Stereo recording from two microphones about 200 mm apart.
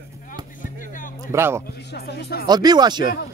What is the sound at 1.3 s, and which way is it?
Speech, 10° right (ahead or behind).